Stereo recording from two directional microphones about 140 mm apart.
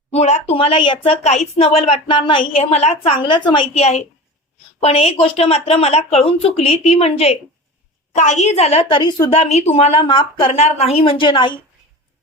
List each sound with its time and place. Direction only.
0.1 s a woman's voice: 55° left (ahead or behind)
8.1 s a woman's voice: 55° left (ahead or behind); by 11.6 s 35° left (ahead or behind)